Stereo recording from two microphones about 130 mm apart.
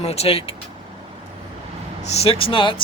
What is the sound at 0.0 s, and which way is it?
Speech, 50° left (ahead or behind).